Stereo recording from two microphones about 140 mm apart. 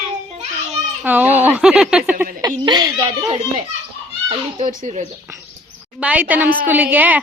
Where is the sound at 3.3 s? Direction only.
45° right (ahead or behind).